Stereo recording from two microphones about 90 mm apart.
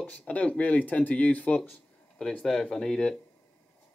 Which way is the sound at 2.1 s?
5° left (ahead or behind).